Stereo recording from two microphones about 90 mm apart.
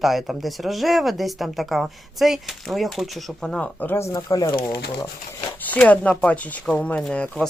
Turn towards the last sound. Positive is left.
turn(degrees=15)  # may be behind; listen again after turning